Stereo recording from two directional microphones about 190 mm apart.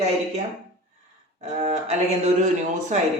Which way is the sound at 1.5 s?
35° right (ahead or behind).